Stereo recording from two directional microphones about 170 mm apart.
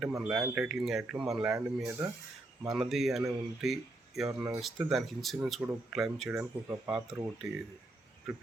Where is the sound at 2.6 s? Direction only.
Centre (ahead or behind).